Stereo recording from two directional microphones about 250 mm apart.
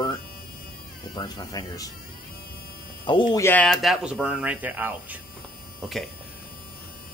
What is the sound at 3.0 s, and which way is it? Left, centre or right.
Speech, centre.